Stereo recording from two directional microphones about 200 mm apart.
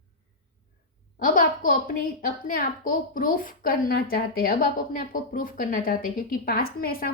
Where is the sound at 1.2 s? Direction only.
45° left (ahead or behind).